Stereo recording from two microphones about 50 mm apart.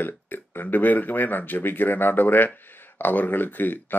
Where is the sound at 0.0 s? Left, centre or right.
Left.